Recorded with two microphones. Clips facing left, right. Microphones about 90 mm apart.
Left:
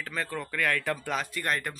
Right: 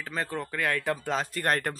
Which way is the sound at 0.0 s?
25° right (ahead or behind).